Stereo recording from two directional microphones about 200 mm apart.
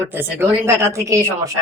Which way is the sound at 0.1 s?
10° right (ahead or behind).